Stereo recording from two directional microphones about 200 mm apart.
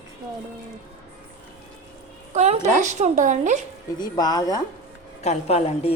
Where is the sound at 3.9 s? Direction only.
20° left (ahead or behind).